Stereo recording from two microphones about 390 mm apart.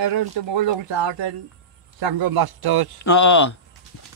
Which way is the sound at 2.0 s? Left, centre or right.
Right.